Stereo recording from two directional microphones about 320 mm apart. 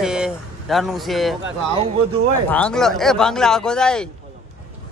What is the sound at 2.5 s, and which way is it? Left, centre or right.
A man's voice, centre.